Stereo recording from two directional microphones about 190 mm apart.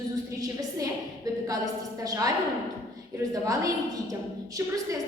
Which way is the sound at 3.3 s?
15° right (ahead or behind).